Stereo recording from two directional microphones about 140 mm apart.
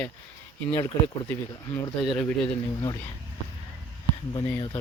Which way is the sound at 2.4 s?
30° left (ahead or behind).